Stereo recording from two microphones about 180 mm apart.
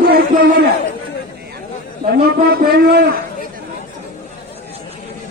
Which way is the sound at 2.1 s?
60° right (ahead or behind).